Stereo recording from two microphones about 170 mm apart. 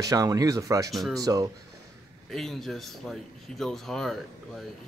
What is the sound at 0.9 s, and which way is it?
Speech, centre (ahead or behind).